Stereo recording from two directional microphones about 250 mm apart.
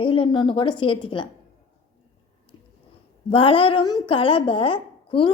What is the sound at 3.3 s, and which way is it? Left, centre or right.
A woman's voice, left.